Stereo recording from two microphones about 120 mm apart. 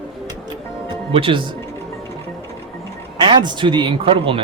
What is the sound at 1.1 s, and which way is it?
Speech, 50° right (ahead or behind).